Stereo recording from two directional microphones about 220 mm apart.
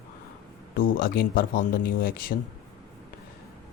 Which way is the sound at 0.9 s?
40° left (ahead or behind).